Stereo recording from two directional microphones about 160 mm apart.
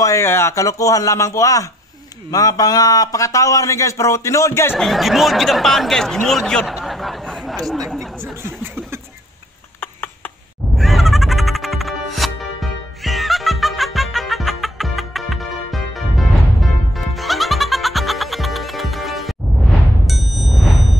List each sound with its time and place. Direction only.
0.0 s a man's voice: 20° left (ahead or behind)
4.7 s speech: centre (ahead or behind)
9.8 s a sound: 10° left (ahead or behind)
10.8 s music: centre (ahead or behind)